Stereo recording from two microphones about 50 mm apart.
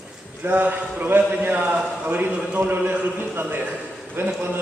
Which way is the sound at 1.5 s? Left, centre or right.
Right.